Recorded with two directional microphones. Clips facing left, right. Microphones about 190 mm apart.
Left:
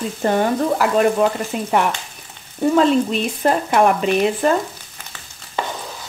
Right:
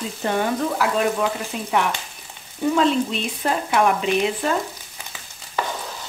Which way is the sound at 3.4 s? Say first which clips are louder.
Left 4 dB; 50° left (ahead or behind).